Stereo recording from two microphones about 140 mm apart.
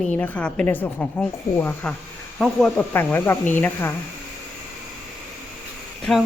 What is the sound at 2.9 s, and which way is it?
A woman's voice, 15° left (ahead or behind).